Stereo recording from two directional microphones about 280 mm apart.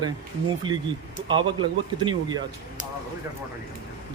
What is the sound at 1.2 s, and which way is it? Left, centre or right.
A man's voice, centre.